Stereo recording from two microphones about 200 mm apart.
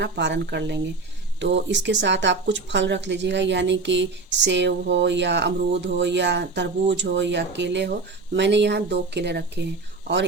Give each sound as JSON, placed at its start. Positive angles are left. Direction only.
{"t": 0.0, "sound": "speech", "side_deg": -60}